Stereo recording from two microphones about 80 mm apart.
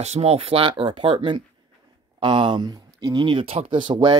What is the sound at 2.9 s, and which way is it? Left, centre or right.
Speech, right.